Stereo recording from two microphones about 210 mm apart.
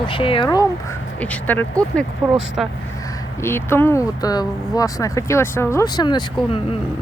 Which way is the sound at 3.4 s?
10° left (ahead or behind).